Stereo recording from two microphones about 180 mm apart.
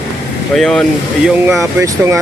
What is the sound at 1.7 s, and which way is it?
Speech, 15° right (ahead or behind).